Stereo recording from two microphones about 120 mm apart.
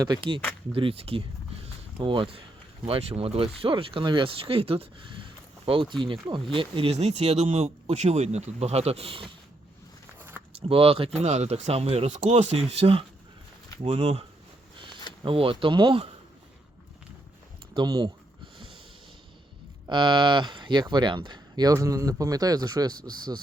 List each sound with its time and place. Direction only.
0.0 s speech: 40° right (ahead or behind)
0.7 s speech: 50° right (ahead or behind)
10.2 s a sound: 15° right (ahead or behind)
10.5 s speech: 50° right (ahead or behind)
11.2 s speech: 65° right (ahead or behind)
12.7 s speech: 50° right (ahead or behind)
13.8 s speech: 60° right (ahead or behind)
15.2 s speech: 45° right (ahead or behind)
17.7 s speech: 35° right (ahead or behind)
19.9 s speech: 45° right (ahead or behind)